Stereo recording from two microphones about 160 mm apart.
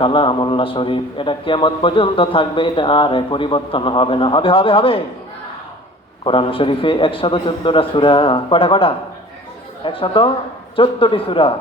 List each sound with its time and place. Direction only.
0.0 s a man's voice: 30° left (ahead or behind)
6.2 s a man's voice: 35° left (ahead or behind)